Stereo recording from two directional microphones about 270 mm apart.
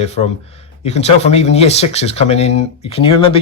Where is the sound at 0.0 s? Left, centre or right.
Left.